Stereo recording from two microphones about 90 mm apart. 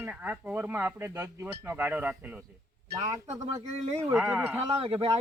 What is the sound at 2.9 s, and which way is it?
Speech, 45° right (ahead or behind).